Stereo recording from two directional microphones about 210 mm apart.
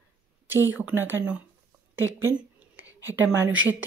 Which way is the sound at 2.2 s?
10° right (ahead or behind).